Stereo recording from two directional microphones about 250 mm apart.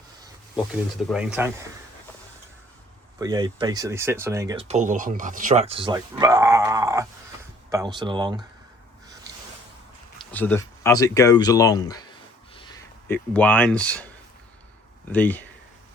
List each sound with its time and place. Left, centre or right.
0.5 s speech: centre
3.2 s speech: centre
4.5 s speech: right
10.3 s speech: centre
15.1 s speech: centre